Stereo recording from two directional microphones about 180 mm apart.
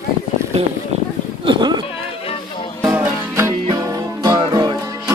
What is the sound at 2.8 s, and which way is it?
Music, 15° right (ahead or behind).